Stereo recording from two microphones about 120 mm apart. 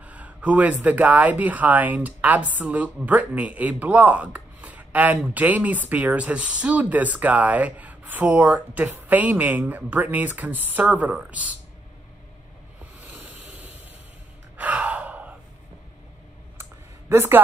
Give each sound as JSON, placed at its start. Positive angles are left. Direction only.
{"t": 0.0, "sound": "speech", "side_deg": -10}
{"t": 13.0, "sound": "a sound", "side_deg": -15}
{"t": 14.6, "sound": "gasp", "side_deg": -10}
{"t": 17.1, "sound": "speech", "side_deg": -20}